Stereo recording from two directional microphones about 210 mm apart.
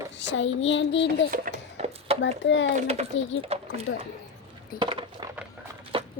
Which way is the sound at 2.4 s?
60° left (ahead or behind).